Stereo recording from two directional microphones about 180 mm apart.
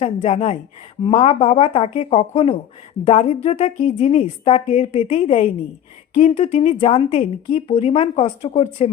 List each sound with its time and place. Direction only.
0.0 s a woman's voice: 35° left (ahead or behind)